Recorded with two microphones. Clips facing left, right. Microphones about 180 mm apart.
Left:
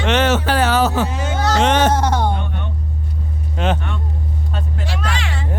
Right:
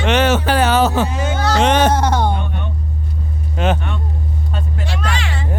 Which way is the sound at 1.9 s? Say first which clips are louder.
Right 1 dB; 70° right (ahead or behind).